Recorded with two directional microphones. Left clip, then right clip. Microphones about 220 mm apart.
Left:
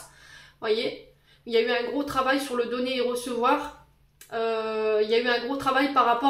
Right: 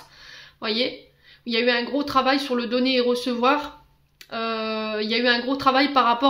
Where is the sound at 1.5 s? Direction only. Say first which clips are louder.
Right 2 dB; 40° right (ahead or behind).